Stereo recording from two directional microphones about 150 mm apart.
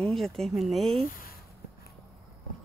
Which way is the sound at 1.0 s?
70° left (ahead or behind).